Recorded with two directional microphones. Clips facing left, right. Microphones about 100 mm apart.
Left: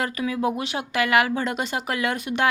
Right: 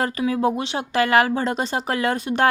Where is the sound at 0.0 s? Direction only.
30° right (ahead or behind).